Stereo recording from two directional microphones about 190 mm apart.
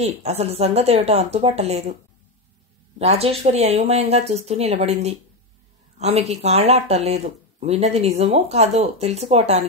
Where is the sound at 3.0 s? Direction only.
35° right (ahead or behind).